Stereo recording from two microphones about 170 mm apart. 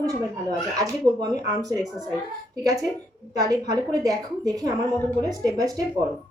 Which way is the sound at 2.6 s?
20° right (ahead or behind).